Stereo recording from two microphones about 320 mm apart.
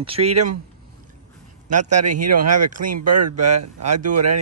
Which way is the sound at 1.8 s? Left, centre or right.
Right.